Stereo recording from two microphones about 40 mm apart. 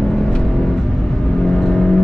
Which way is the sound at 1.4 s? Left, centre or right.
Centre.